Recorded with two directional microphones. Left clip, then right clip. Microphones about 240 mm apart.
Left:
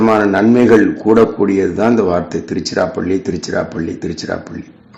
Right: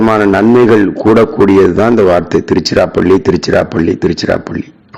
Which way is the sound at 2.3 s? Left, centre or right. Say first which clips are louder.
Right 8 dB; right.